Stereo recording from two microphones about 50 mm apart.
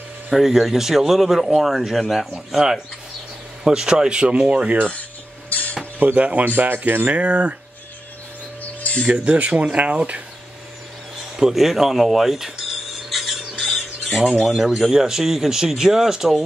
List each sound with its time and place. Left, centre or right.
0.3 s speech: centre; by 4.7 s right
5.5 s a sound: left
5.9 s speech: right
7.2 s speech: right
9.0 s speech: right
11.3 s speech: centre
13.1 s a sound: centre
14.4 s speech: centre